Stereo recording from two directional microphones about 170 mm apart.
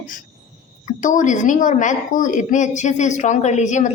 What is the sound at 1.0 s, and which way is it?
A woman's voice, 50° left (ahead or behind).